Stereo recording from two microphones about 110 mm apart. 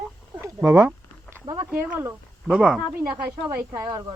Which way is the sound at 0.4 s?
25° right (ahead or behind).